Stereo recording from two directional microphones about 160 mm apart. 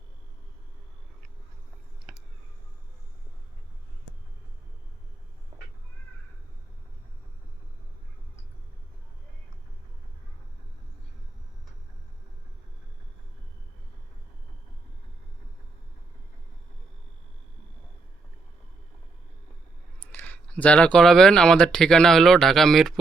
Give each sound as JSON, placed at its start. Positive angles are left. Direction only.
{"t": 2.1, "sound": "a sound", "side_deg": -5}
{"t": 5.5, "sound": "cat", "side_deg": -40}
{"t": 20.0, "sound": "speech", "side_deg": 10}